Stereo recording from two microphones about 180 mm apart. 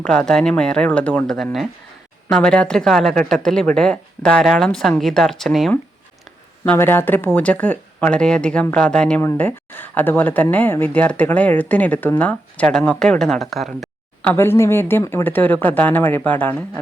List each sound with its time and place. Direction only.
0.0 s speech: 5° left (ahead or behind)
6.7 s speech: 10° left (ahead or behind)
14.3 s speech: 15° left (ahead or behind)